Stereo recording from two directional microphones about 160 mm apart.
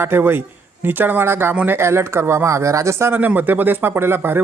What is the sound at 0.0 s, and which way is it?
A man's voice, 15° right (ahead or behind).